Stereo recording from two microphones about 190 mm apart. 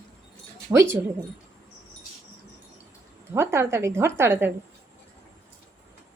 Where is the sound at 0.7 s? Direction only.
15° right (ahead or behind).